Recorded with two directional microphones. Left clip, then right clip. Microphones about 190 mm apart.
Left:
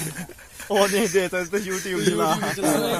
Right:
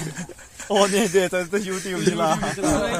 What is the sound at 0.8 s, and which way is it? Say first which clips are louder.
Speech: right 2 dB; 55° right (ahead or behind).